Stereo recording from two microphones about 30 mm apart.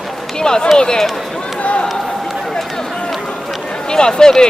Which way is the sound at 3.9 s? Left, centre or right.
Left.